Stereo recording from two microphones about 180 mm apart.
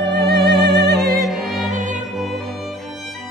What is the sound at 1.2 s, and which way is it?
Music, centre (ahead or behind).